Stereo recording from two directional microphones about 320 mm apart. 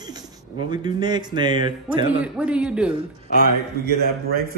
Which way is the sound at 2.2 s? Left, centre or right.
Centre.